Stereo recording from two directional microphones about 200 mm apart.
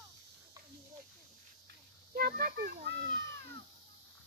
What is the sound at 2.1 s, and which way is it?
A child's voice, 50° right (ahead or behind).